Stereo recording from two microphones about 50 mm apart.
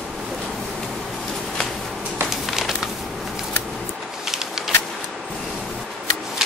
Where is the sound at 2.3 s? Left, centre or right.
Centre.